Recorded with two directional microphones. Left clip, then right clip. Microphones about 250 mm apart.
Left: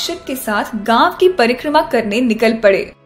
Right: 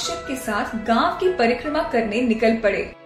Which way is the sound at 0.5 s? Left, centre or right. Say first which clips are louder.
Left 7 dB; left.